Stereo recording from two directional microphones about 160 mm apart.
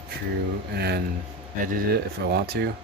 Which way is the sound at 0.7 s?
90° right.